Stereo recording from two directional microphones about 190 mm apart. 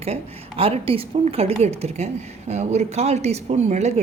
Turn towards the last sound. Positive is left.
turn(degrees=-35)  # may be behind; listen again after turning